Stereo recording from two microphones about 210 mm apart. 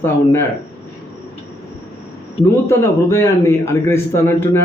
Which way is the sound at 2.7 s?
15° left (ahead or behind).